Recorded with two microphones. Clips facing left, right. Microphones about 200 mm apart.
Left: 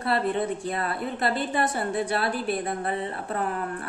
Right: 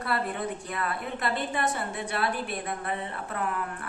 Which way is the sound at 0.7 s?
35° left (ahead or behind).